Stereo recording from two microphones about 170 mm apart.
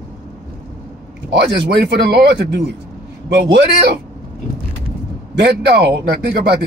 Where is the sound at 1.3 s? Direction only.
75° right (ahead or behind).